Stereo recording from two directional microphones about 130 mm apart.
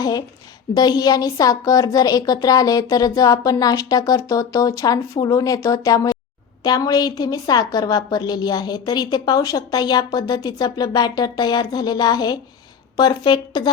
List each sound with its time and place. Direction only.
0.0 s a woman's voice: 30° left (ahead or behind)